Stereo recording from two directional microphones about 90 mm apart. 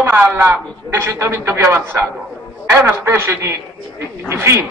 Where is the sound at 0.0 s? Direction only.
20° right (ahead or behind).